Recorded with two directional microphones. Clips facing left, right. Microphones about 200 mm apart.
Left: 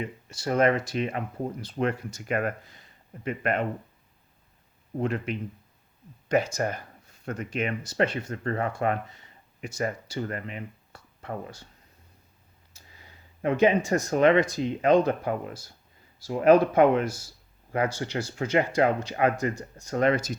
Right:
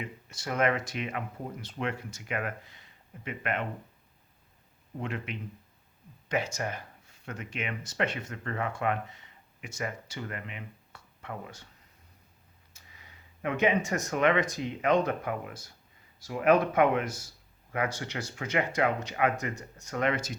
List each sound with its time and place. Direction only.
0.0 s speech: 30° left (ahead or behind)
4.9 s speech: 40° left (ahead or behind)
12.7 s speech: 30° left (ahead or behind)